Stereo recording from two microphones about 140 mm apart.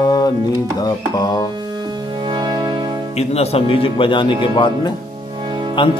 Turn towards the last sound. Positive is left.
turn(degrees=-35)  # may be behind; listen again after turning